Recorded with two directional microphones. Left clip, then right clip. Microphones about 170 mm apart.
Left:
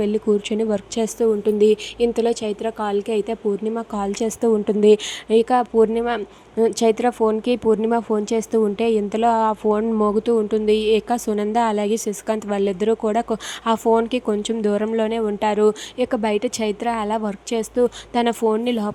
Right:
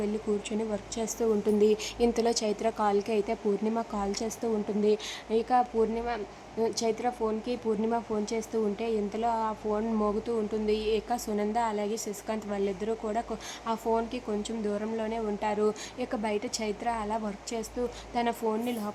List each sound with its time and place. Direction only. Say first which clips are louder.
0.0 s a woman's voice: left 11 dB; 35° left (ahead or behind)